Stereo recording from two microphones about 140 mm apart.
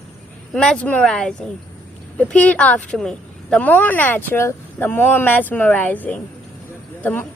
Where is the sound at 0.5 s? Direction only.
5° left (ahead or behind).